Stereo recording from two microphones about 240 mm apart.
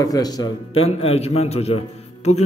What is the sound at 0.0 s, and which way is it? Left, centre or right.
A man's voice, centre.